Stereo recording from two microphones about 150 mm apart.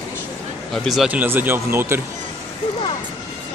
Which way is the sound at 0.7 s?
Centre (ahead or behind).